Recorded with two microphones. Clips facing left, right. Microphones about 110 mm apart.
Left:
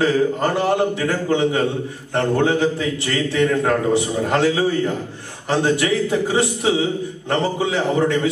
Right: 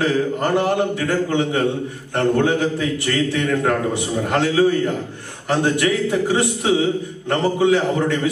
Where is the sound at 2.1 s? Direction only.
20° left (ahead or behind).